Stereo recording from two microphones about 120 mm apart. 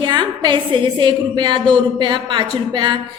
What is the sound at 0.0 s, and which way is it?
A woman's voice, 40° right (ahead or behind).